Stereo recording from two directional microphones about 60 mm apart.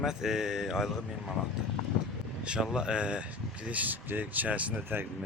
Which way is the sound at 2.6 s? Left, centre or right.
Centre.